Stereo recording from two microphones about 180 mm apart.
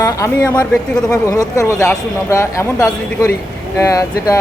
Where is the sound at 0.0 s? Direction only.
15° left (ahead or behind).